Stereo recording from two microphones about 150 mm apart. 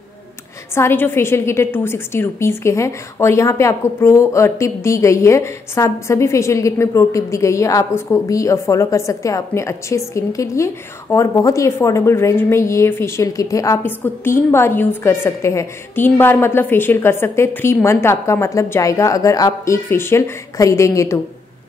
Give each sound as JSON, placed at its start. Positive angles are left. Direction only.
{"t": 0.7, "sound": "a woman's voice", "side_deg": 15}